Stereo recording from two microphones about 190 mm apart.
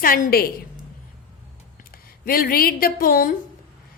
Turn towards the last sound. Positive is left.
turn(degrees=50)  # may be behind; listen again after turning